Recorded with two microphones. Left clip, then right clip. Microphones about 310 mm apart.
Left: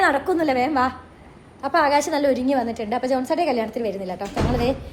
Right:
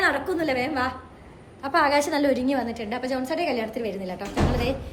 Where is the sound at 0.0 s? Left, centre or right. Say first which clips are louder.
Left 4 dB; centre.